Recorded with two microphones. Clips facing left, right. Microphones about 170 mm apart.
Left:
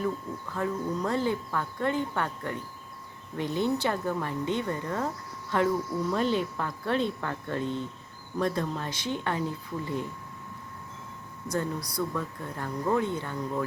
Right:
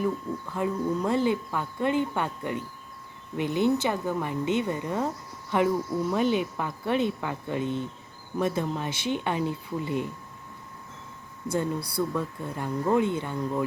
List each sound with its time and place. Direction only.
0.5 s speech: 15° right (ahead or behind)
11.4 s speech: 30° right (ahead or behind)
12.1 s speech: 15° right (ahead or behind)